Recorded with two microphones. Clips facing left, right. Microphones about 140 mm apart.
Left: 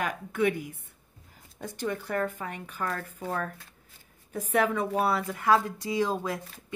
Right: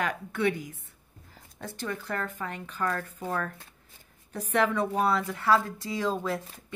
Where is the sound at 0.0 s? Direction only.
10° left (ahead or behind).